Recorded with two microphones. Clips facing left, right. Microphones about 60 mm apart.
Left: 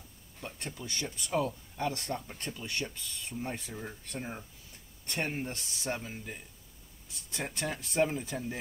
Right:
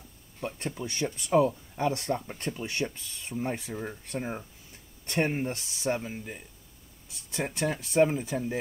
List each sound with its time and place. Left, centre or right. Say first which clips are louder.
0.4 s speech: right 7 dB; right
3.5 s speech: right 5 dB; centre
5.6 s speech: right 6 dB; centre